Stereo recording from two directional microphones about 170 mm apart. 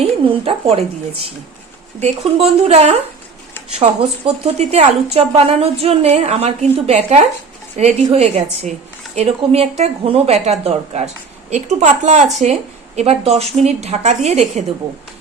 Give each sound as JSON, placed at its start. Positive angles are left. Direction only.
{"t": 0.0, "sound": "speech", "side_deg": -35}
{"t": 2.0, "sound": "a woman's voice", "side_deg": -40}